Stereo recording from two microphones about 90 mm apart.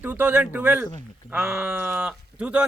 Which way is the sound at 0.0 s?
20° right (ahead or behind).